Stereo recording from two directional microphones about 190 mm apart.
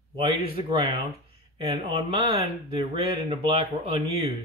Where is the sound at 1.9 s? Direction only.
25° right (ahead or behind).